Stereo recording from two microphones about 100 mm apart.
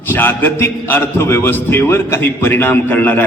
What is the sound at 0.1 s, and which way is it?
A man's voice, 20° left (ahead or behind).